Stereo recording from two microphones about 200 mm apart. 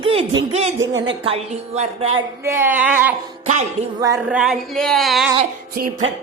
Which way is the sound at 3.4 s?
35° right (ahead or behind).